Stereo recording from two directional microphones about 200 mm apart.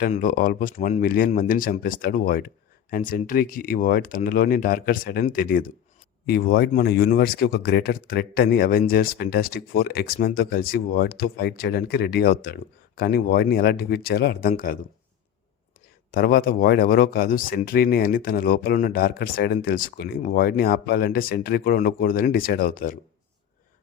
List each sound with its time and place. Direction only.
0.0 s speech: 45° left (ahead or behind)
16.1 s speech: 45° left (ahead or behind)